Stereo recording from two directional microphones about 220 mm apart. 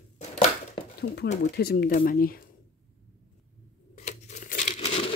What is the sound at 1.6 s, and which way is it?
Speech, 45° left (ahead or behind).